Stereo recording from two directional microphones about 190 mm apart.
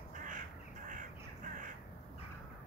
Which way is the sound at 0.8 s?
45° right (ahead or behind).